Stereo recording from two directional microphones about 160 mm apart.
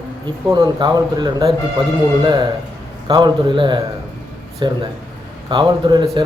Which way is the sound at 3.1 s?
30° right (ahead or behind).